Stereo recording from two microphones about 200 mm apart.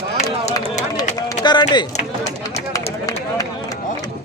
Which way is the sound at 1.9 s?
35° left (ahead or behind).